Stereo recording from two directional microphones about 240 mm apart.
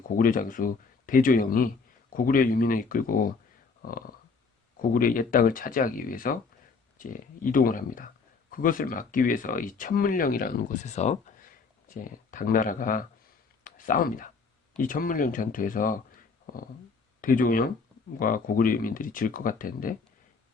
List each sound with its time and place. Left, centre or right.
0.2 s speech: left
17.2 s speech: left